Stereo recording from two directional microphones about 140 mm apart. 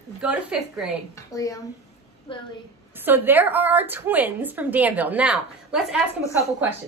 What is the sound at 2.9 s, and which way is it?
Speech, 15° right (ahead or behind).